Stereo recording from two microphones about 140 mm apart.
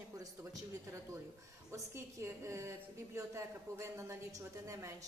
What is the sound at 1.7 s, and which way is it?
A woman's voice, 20° right (ahead or behind).